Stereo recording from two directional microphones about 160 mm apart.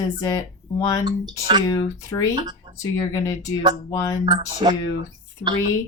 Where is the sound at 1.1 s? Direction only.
25° right (ahead or behind).